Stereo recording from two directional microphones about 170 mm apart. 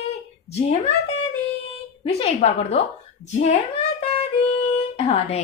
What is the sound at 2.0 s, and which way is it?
Speech, 35° left (ahead or behind).